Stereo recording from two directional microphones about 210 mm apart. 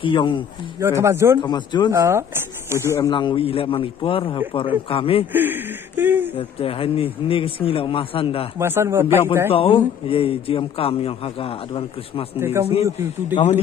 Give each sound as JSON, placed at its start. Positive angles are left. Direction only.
{"t": 0.0, "sound": "speech", "side_deg": 25}
{"t": 0.7, "sound": "speech", "side_deg": -15}
{"t": 1.4, "sound": "speech", "side_deg": 20}
{"t": 1.9, "sound": "speech", "side_deg": -10}
{"t": 2.9, "sound": "speech", "side_deg": 20}
{"t": 5.3, "sound": "speech", "side_deg": -10}
{"t": 6.3, "sound": "speech", "side_deg": 25}
{"t": 8.5, "sound": "speech", "side_deg": -10}
{"t": 9.5, "sound": "speech", "side_deg": 25}
{"t": 12.4, "sound": "speech", "side_deg": -10}
{"t": 13.3, "sound": "a man's voice", "side_deg": 35}